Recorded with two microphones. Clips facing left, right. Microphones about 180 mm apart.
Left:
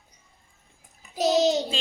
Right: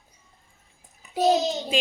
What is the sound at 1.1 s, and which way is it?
Speech, 80° left.